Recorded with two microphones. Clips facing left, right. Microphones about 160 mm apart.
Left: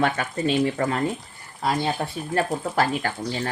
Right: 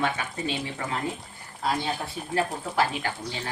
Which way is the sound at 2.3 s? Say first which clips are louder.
Left 3 dB; 50° left (ahead or behind).